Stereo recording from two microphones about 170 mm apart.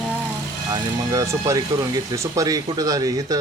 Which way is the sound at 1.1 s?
15° right (ahead or behind).